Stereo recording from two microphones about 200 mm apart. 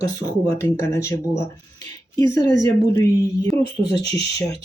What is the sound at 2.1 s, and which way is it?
Speech, 15° left (ahead or behind).